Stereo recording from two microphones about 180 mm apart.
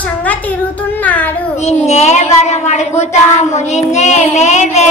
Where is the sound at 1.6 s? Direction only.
35° left (ahead or behind).